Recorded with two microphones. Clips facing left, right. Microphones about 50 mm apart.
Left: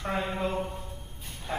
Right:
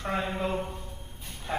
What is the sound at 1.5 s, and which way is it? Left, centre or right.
Bow-wow, centre.